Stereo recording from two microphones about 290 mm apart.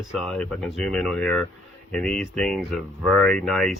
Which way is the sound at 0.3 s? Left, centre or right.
Centre.